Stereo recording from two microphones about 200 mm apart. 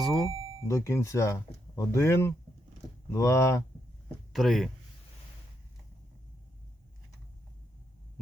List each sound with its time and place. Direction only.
0.0 s a sound: centre (ahead or behind)
0.7 s speech: 15° left (ahead or behind)
4.3 s speech: centre (ahead or behind)